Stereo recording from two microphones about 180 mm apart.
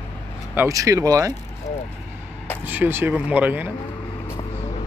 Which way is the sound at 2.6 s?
10° right (ahead or behind).